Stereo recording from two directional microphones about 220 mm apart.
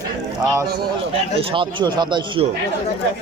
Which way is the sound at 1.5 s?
20° right (ahead or behind).